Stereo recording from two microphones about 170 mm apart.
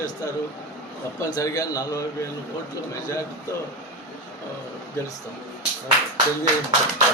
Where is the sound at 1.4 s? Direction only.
20° left (ahead or behind).